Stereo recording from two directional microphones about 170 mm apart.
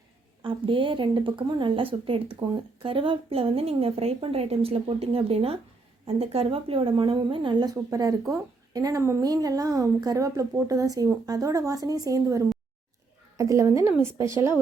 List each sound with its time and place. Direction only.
0.4 s a woman's voice: 30° right (ahead or behind)